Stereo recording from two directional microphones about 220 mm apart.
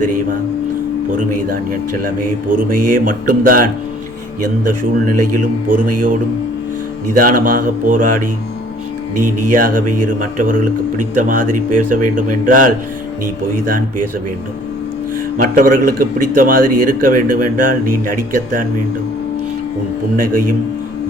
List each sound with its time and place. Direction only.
1.3 s a man's voice: 40° right (ahead or behind)
7.1 s a man's voice: 40° right (ahead or behind)
9.1 s speech: 90° right
9.5 s a man's voice: 40° right (ahead or behind)
15.4 s a man's voice: 40° right (ahead or behind)
20.1 s a man's voice: 40° right (ahead or behind)